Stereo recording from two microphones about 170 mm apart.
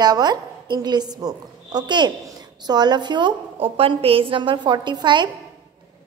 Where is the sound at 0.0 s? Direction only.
25° right (ahead or behind).